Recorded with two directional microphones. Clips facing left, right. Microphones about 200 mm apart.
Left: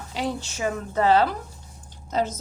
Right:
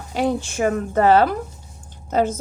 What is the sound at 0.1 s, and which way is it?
A woman's voice, 50° right (ahead or behind).